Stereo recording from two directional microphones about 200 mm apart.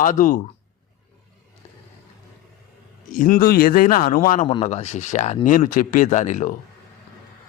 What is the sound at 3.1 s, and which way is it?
A man's voice, 40° left (ahead or behind).